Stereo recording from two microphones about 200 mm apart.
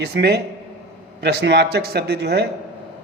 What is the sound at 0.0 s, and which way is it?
A man's voice, 55° right (ahead or behind).